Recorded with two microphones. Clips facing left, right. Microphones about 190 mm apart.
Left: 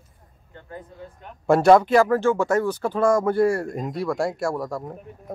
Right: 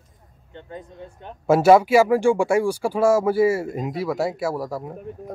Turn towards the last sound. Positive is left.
turn(degrees=-5)  # may be behind; listen again after turning